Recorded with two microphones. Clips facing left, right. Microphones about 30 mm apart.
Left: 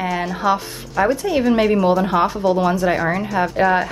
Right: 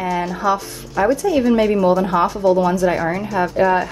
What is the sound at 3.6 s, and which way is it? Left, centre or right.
Speech, left.